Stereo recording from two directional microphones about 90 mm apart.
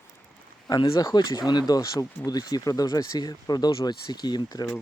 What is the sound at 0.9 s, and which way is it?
Speech, 40° left (ahead or behind).